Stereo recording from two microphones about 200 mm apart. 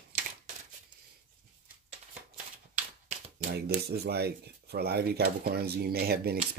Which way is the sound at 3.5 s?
50° right (ahead or behind).